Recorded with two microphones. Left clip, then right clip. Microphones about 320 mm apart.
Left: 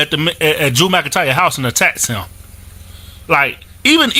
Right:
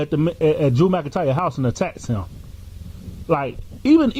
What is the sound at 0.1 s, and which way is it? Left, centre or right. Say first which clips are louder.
Speech: left 4 dB; left.